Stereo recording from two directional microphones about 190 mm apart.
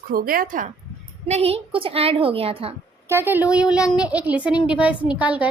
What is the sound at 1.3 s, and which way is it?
A woman's voice, 30° right (ahead or behind).